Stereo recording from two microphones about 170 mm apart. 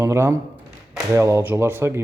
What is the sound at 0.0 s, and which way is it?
Speech, 15° right (ahead or behind).